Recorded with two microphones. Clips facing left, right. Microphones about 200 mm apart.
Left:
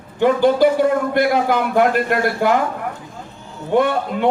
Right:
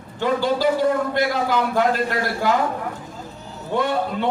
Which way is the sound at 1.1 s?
55° left (ahead or behind).